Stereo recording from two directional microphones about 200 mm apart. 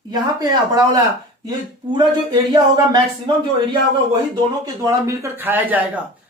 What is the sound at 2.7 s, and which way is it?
Speech, 20° right (ahead or behind).